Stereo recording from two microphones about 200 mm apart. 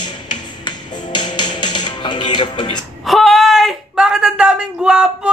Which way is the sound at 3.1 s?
Centre (ahead or behind).